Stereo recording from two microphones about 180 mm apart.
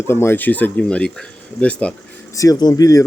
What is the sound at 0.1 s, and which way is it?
Speech, 15° left (ahead or behind).